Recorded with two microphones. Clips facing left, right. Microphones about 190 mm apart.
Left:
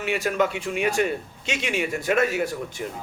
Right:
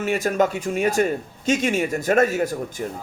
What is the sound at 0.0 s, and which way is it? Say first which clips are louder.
A man's voice: right 3 dB; 45° right (ahead or behind).